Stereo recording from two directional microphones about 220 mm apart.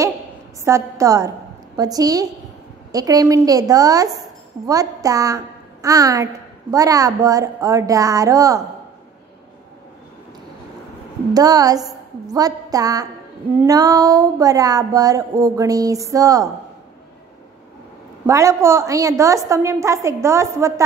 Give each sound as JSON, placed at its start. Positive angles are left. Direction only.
{"t": 0.7, "sound": "child singing", "side_deg": -15}
{"t": 4.6, "sound": "a woman's voice", "side_deg": -15}
{"t": 6.7, "sound": "child singing", "side_deg": -15}
{"t": 11.3, "sound": "a woman's voice", "side_deg": -15}
{"t": 13.6, "sound": "child singing", "side_deg": -15}
{"t": 18.2, "sound": "child singing", "side_deg": -15}